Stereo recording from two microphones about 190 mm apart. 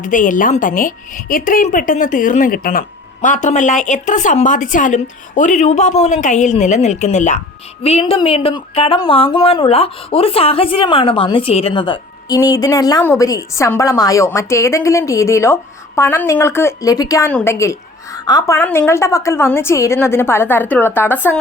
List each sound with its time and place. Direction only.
0.0 s a woman's voice: 45° left (ahead or behind); by 21.3 s 10° left (ahead or behind)